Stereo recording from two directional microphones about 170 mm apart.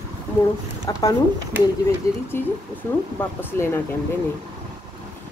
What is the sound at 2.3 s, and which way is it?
Speech, 15° left (ahead or behind).